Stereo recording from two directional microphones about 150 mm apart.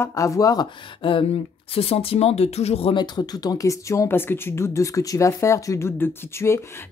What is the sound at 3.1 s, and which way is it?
Speech, 25° left (ahead or behind).